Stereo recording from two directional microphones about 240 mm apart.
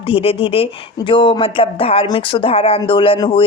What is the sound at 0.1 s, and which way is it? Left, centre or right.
Speech, left.